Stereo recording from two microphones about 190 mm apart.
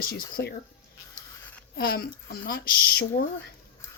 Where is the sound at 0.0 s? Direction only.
50° left (ahead or behind).